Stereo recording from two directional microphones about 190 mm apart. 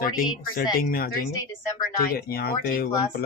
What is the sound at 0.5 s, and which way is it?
Speech, 50° left (ahead or behind).